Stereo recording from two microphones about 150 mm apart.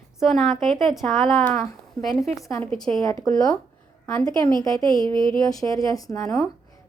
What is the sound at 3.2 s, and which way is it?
A woman's voice, 25° left (ahead or behind).